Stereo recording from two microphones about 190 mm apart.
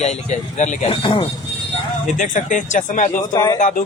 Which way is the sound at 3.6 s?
45° left (ahead or behind).